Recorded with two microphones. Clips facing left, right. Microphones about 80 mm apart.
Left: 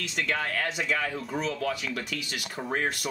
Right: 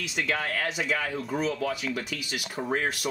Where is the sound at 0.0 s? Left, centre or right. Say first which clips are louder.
Even; centre.